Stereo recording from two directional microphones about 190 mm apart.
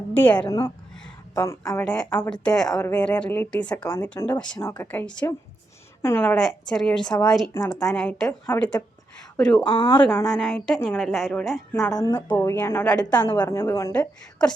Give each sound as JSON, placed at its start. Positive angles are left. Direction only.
{"t": 0.1, "sound": "speech", "side_deg": 10}
{"t": 1.8, "sound": "a woman's voice", "side_deg": 5}
{"t": 9.6, "sound": "a woman's voice", "side_deg": 25}
{"t": 10.2, "sound": "a woman's voice", "side_deg": 0}
{"t": 11.7, "sound": "a woman's voice", "side_deg": 15}
{"t": 13.3, "sound": "speech", "side_deg": 20}